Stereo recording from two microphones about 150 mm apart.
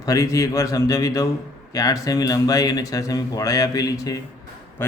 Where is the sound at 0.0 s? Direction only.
25° left (ahead or behind).